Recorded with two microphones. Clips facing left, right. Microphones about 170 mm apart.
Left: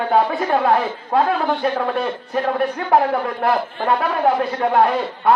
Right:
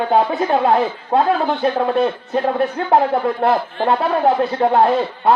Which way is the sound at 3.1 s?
25° right (ahead or behind).